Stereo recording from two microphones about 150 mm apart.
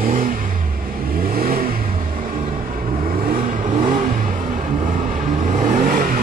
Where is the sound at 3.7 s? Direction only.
40° right (ahead or behind).